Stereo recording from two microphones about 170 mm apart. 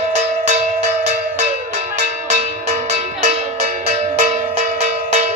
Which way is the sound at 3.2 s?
40° right (ahead or behind).